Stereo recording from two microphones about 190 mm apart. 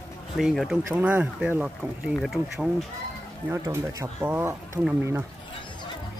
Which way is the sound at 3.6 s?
15° right (ahead or behind).